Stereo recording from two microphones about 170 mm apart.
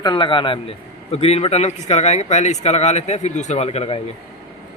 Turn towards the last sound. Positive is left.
turn(degrees=35)  # may be behind; listen again after turning